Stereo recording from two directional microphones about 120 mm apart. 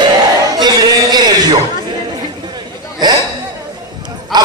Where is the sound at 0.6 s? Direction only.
35° right (ahead or behind).